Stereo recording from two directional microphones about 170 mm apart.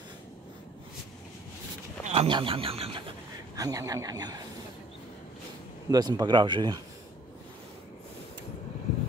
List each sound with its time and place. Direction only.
2.0 s speech: 35° right (ahead or behind)
3.5 s speech: 20° right (ahead or behind)
5.9 s speech: 25° right (ahead or behind)